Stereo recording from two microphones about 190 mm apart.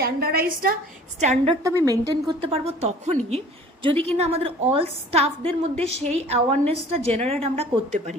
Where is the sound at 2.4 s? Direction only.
30° right (ahead or behind).